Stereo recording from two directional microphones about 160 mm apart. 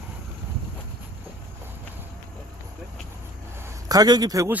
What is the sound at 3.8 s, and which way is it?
Speech, 25° right (ahead or behind).